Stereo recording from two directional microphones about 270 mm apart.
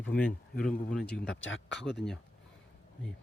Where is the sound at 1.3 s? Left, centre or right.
Left.